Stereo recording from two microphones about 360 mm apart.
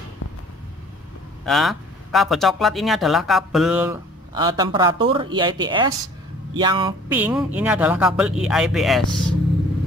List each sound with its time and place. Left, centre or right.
0.2 s vehicle: left
1.4 s speech: centre